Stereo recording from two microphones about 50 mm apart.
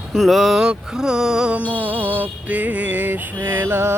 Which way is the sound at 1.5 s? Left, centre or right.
Right.